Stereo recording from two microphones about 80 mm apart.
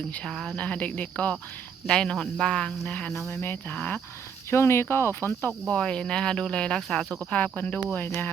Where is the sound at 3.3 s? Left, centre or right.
Left.